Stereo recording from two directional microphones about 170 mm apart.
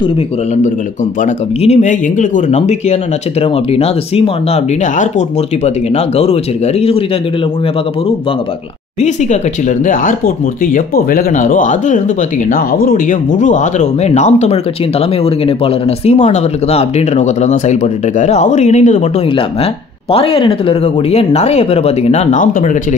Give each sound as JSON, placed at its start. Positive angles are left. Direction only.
{"t": 1.2, "sound": "speech", "side_deg": 40}
{"t": 9.8, "sound": "speech", "side_deg": 55}